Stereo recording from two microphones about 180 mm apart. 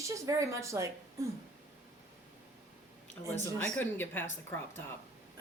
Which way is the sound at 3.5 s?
10° left (ahead or behind).